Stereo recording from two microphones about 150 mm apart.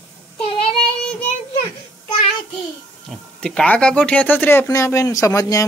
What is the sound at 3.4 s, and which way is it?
Speech, 5° left (ahead or behind).